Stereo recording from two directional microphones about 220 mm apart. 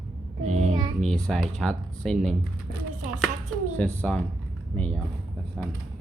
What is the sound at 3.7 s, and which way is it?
Speech, 5° left (ahead or behind).